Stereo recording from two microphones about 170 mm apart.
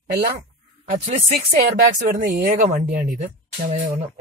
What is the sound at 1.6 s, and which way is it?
A man's voice, 55° right (ahead or behind).